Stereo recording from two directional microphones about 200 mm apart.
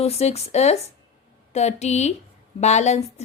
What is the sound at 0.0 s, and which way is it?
Speech, 30° left (ahead or behind).